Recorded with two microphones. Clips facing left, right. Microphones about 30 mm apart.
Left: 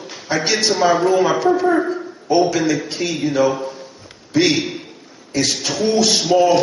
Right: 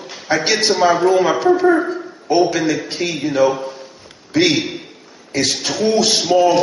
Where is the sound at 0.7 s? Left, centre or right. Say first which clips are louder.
Right 1 dB; centre.